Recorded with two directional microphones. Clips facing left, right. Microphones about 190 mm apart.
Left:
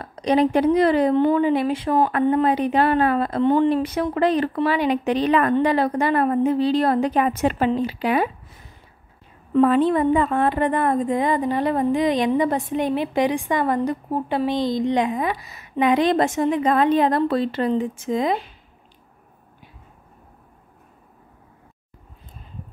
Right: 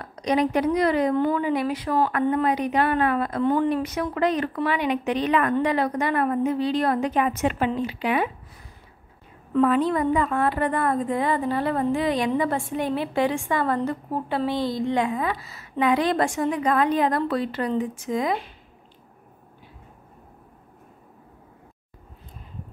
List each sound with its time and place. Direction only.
0.0 s speech: 30° left (ahead or behind)
9.5 s a woman's voice: 30° left (ahead or behind)